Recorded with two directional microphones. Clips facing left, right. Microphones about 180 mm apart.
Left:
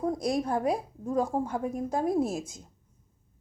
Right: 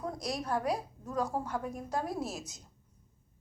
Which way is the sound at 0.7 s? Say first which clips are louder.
Left 5 dB; 50° left (ahead or behind).